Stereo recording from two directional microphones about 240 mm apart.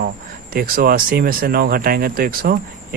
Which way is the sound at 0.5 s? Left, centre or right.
Right.